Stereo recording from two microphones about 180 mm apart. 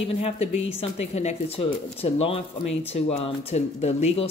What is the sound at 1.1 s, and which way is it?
Speech, 35° left (ahead or behind).